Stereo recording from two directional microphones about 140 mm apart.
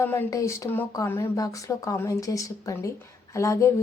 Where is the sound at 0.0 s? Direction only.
15° left (ahead or behind).